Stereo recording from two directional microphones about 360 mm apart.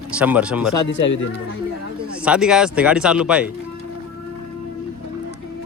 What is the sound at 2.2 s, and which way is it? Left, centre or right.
Speech, centre.